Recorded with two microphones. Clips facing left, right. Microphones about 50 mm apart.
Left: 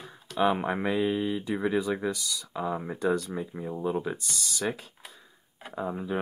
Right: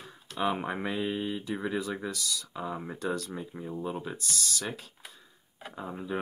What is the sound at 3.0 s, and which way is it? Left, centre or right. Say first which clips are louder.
Speech: left 6 dB; left.